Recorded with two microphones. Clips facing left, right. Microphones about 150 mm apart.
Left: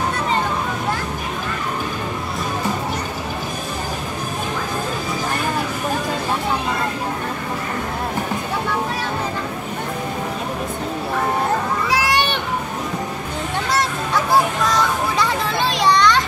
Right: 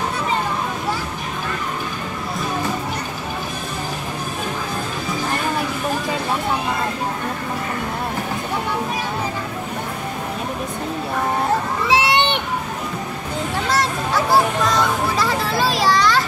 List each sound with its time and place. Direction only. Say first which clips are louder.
11.9 s a sound: right 4 dB; 25° right (ahead or behind)
13.7 s honk: right 1 dB; centre (ahead or behind)
15.1 s children playing: even; centre (ahead or behind)